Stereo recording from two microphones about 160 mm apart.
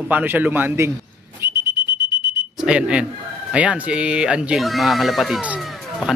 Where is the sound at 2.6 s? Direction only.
5° right (ahead or behind).